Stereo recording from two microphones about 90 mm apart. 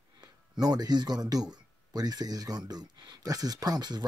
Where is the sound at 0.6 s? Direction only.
45° right (ahead or behind).